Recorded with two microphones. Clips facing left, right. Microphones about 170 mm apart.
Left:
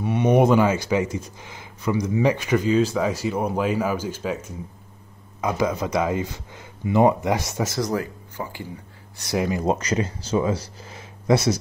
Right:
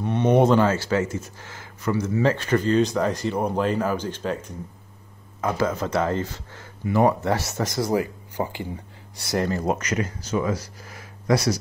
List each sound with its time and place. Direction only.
0.0 s speech: 10° left (ahead or behind)
7.9 s speech: 15° right (ahead or behind)
9.3 s speech: 10° left (ahead or behind)
9.7 s speech: 30° left (ahead or behind)